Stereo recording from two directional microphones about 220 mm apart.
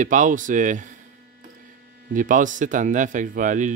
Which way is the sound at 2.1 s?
35° right (ahead or behind).